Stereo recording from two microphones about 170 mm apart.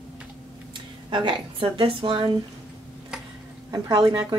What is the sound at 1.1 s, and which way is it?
Speech, 30° right (ahead or behind).